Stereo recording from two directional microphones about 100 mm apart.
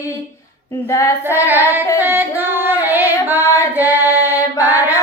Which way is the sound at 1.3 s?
20° right (ahead or behind).